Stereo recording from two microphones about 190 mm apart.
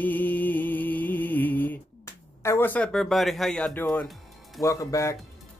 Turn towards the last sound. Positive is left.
turn(degrees=15)  # may be behind; listen again after turning